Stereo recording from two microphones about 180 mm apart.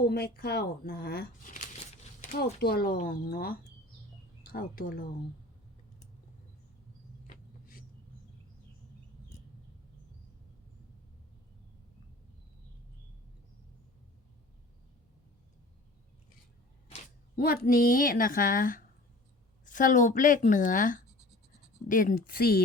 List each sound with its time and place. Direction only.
0.0 s speech: 60° left (ahead or behind)
7.3 s a sound: 55° left (ahead or behind)
17.3 s a woman's voice: 55° left (ahead or behind)